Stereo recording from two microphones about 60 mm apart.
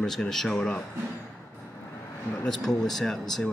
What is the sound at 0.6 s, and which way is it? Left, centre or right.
Speech, centre.